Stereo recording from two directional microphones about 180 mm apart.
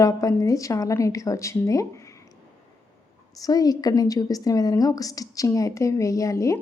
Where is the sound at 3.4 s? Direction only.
20° left (ahead or behind).